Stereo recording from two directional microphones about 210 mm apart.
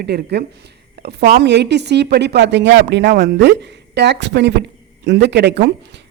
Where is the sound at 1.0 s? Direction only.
50° right (ahead or behind).